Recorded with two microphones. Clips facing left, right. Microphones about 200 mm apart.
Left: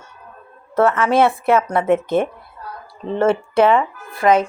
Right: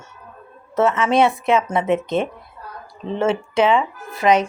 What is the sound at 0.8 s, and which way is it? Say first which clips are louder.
Speech: left 2 dB; 20° right (ahead or behind).